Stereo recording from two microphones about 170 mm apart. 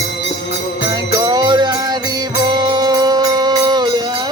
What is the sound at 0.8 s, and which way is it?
Music, 25° right (ahead or behind).